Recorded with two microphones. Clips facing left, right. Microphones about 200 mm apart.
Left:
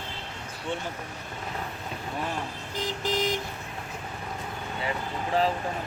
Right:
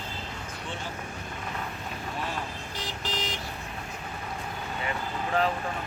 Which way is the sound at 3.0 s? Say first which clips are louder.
Left 8 dB; 50° left (ahead or behind).